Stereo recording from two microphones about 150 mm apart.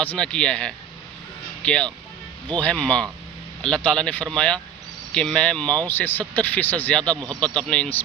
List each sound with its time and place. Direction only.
0.0 s speech: 10° left (ahead or behind)
7.2 s speech: 25° right (ahead or behind)
7.4 s speech: 5° left (ahead or behind)